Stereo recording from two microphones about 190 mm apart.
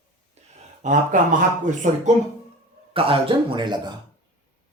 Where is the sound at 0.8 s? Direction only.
40° right (ahead or behind).